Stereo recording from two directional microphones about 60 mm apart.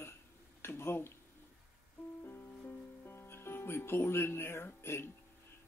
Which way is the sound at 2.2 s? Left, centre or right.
Left.